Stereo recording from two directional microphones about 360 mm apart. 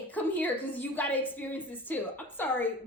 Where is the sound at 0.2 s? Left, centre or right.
Centre.